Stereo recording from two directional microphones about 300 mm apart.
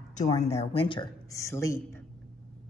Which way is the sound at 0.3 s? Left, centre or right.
Left.